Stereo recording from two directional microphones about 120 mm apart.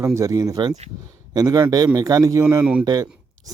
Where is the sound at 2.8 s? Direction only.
30° right (ahead or behind).